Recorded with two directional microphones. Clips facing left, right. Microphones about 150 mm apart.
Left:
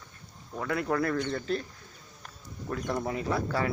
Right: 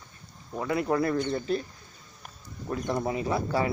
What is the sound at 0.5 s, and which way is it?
Speech, 15° right (ahead or behind).